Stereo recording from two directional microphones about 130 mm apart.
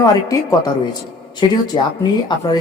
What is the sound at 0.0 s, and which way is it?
Speech, 25° left (ahead or behind).